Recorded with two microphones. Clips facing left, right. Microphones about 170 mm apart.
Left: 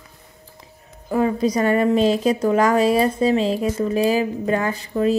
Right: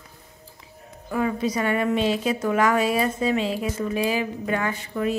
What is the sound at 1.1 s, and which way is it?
A woman's voice, 35° left (ahead or behind).